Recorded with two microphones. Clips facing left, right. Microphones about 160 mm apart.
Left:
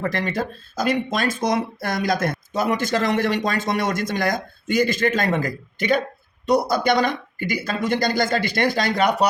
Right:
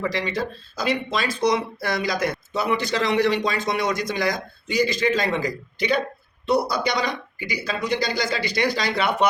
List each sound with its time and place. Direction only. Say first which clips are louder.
0.0 s speech: left 1 dB; 55° left (ahead or behind)